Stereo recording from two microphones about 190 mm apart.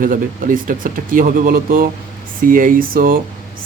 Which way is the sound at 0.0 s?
45° right (ahead or behind).